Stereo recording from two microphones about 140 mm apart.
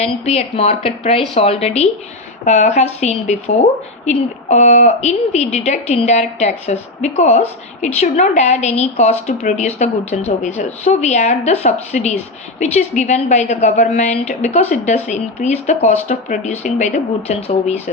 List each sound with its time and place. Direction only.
0.0 s a woman's voice: 50° left (ahead or behind)